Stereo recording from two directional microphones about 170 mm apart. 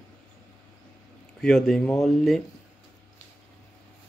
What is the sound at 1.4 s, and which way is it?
Speech, 5° left (ahead or behind).